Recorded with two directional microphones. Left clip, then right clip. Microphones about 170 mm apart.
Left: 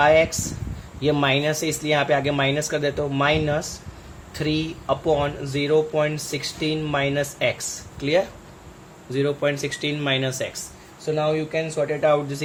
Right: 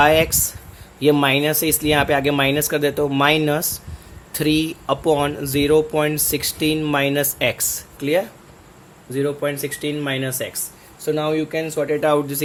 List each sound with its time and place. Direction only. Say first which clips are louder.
0.0 s speech: right 2 dB; 55° right (ahead or behind)
8.0 s speech: right 1 dB; 35° right (ahead or behind)
9.1 s speech: right 1 dB; 20° right (ahead or behind)
11.0 s speech: right 2 dB; 60° right (ahead or behind)